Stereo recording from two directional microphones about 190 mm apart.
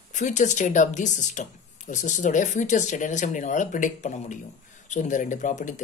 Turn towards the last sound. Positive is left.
turn(degrees=40)  # may be behind; listen again after turning